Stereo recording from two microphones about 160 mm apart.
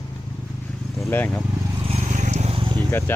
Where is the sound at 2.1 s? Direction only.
50° right (ahead or behind).